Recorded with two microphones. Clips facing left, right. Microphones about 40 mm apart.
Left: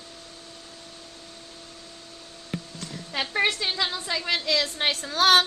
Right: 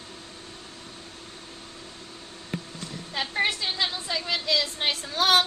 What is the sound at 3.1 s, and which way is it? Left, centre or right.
Speech, left.